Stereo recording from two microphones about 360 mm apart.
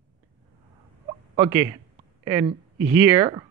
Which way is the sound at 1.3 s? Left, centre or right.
Centre.